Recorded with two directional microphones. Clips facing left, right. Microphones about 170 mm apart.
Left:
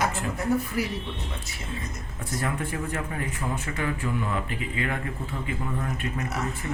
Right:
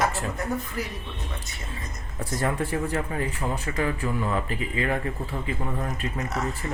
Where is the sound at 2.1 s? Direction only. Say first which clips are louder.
Right 4 dB; 35° right (ahead or behind).